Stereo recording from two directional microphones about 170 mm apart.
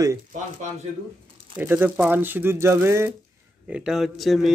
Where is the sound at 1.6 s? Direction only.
10° right (ahead or behind).